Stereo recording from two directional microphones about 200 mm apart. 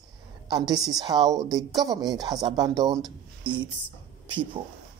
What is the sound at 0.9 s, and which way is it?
Speech, 20° right (ahead or behind).